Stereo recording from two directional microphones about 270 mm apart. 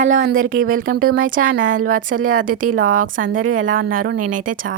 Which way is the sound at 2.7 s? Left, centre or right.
Right.